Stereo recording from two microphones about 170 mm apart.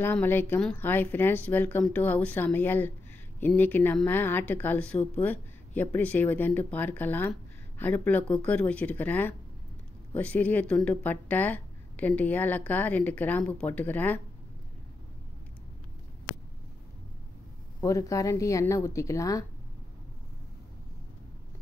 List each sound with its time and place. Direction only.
0.0 s speech: 10° left (ahead or behind)
17.7 s speech: 20° left (ahead or behind)